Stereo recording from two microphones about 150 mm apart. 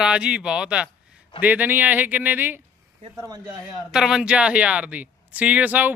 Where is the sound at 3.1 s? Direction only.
25° right (ahead or behind).